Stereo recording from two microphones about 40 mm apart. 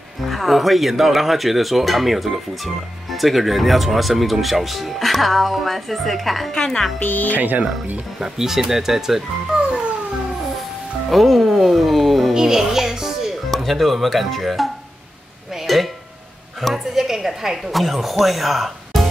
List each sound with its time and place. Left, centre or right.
0.2 s speech: centre
6.5 s speech: centre
7.0 s speech: left
7.3 s speech: right
8.2 s speech: centre
11.1 s music: centre
12.4 s music: centre
13.5 s speech: centre
15.5 s a sound: centre
16.7 s speech: centre